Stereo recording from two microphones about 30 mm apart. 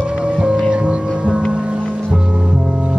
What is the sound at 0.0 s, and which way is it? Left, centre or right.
Music, right.